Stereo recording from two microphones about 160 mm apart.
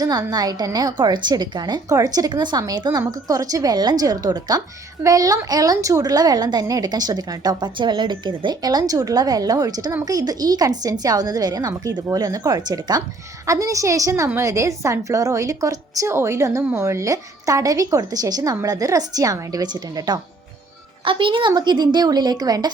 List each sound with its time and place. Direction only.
0.0 s a woman's voice: 25° right (ahead or behind)